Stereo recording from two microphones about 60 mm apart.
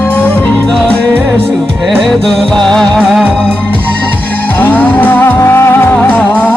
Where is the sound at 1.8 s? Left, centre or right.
Centre.